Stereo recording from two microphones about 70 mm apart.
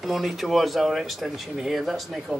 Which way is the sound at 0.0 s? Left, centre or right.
Centre.